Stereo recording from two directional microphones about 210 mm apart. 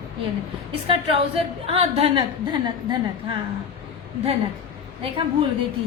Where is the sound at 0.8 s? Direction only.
25° right (ahead or behind).